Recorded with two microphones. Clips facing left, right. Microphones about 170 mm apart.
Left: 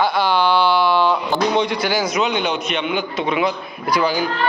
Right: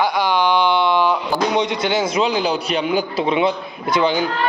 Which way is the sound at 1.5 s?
20° right (ahead or behind).